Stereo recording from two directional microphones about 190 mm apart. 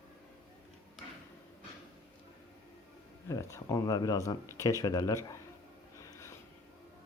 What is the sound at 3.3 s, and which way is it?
Speech, 15° left (ahead or behind).